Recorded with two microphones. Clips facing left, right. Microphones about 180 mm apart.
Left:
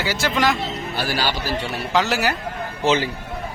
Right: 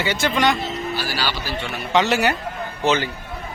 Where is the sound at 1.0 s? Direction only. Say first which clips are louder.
Left 7 dB; 50° left (ahead or behind).